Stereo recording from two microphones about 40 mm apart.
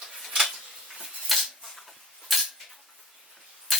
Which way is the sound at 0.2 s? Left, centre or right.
Centre.